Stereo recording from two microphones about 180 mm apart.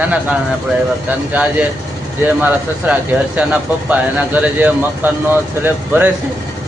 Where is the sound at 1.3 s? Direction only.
10° right (ahead or behind).